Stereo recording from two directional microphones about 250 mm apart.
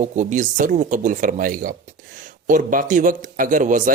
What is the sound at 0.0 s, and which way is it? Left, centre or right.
A man's voice, right.